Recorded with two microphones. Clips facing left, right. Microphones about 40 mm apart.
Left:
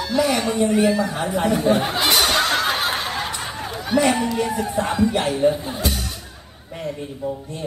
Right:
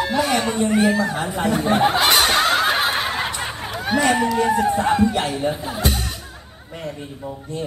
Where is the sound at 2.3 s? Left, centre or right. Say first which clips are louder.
Right 2 dB; centre; by 5.3 s right.